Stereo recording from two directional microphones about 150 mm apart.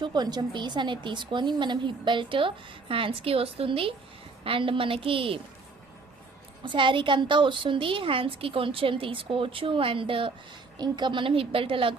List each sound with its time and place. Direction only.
0.0 s a woman's voice: 30° right (ahead or behind)
6.7 s a woman's voice: 35° right (ahead or behind)